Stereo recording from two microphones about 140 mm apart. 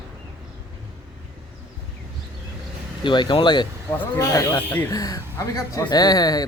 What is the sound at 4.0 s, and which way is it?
Speech, 25° left (ahead or behind).